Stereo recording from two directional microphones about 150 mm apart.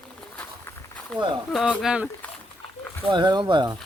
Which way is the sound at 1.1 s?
5° right (ahead or behind).